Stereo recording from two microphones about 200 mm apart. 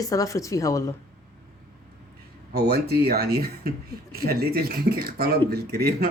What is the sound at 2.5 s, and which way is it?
Speech, 50° right (ahead or behind).